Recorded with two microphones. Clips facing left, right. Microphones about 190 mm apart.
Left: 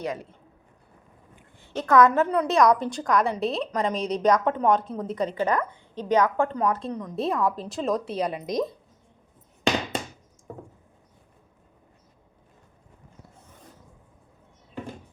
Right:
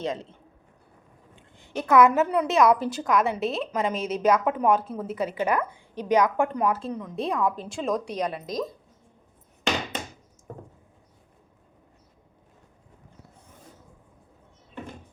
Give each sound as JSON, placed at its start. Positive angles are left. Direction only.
{"t": 0.0, "sound": "a man's voice", "side_deg": -25}
{"t": 1.4, "sound": "a woman's voice", "side_deg": -15}